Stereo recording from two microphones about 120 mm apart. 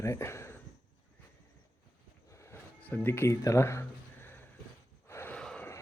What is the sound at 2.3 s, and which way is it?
Livestock, 25° left (ahead or behind).